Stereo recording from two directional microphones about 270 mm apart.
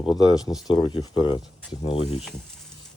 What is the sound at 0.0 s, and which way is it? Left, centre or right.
Speech, centre.